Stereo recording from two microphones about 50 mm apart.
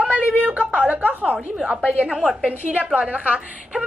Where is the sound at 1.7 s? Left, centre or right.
Right.